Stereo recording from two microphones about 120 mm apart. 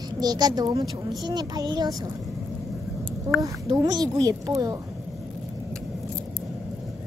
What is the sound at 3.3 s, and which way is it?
Speech, 20° right (ahead or behind).